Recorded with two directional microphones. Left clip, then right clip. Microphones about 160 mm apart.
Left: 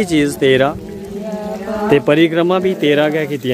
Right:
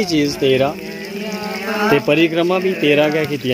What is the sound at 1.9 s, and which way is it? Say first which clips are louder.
Speech: left 4 dB; 60° left (ahead or behind).